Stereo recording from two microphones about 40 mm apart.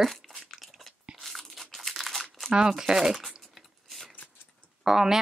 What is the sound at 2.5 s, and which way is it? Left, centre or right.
Speech, centre.